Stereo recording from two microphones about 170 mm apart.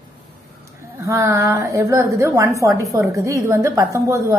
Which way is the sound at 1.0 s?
15° right (ahead or behind).